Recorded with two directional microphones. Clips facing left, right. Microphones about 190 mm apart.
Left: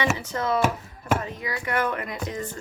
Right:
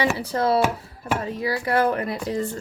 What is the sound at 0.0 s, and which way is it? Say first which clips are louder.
Speech: right 4 dB; 35° right (ahead or behind).